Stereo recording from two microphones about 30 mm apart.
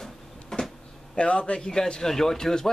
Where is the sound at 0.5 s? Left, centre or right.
Left.